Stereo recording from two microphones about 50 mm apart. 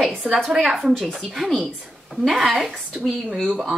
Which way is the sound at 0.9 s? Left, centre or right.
Centre.